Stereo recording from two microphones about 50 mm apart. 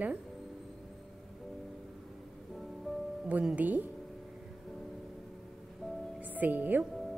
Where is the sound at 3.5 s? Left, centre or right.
Right.